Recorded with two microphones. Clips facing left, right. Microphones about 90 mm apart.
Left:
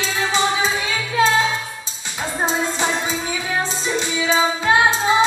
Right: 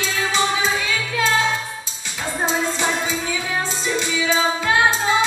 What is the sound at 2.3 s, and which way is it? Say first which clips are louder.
Music: left 1 dB; 25° left (ahead or behind).